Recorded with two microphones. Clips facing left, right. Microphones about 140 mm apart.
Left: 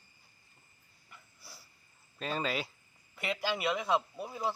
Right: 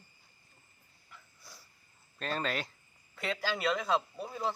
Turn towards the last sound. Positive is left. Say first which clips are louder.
# even
turn(degrees=5)  # may be behind; listen again after turning